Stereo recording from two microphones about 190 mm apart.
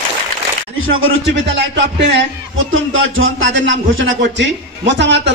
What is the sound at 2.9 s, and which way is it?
A man's voice, 90° right.